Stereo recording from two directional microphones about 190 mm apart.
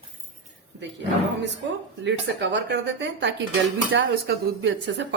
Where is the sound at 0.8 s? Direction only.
65° right (ahead or behind).